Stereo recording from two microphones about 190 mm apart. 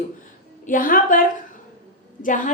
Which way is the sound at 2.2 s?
45° left (ahead or behind).